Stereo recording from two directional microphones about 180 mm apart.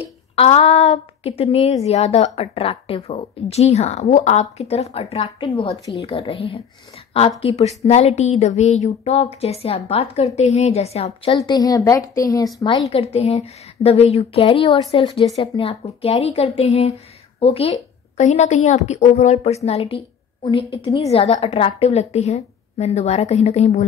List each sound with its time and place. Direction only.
0.4 s a woman's voice: 35° left (ahead or behind)
6.0 s a woman's voice: 30° left (ahead or behind)
11.3 s a woman's voice: 20° left (ahead or behind); by 23.9 s 35° left (ahead or behind)